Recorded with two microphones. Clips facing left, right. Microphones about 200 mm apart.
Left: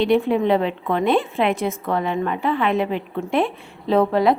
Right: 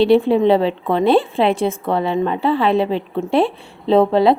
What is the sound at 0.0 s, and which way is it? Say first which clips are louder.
A woman's voice: right 5 dB; 30° right (ahead or behind).